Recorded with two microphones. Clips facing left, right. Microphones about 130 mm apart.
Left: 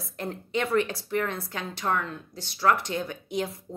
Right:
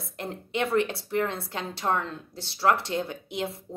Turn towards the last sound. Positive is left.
turn(degrees=-25)  # may be behind; listen again after turning